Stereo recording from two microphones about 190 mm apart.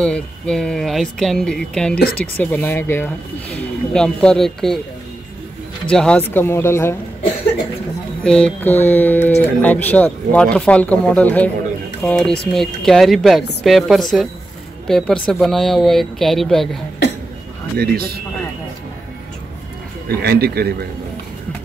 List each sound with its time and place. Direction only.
0.0 s speech: 5° left (ahead or behind)
5.9 s speech: 5° left (ahead or behind)
8.2 s speech: 5° left (ahead or behind)
17.7 s speech: 55° right (ahead or behind)
20.2 s a man's voice: 55° right (ahead or behind)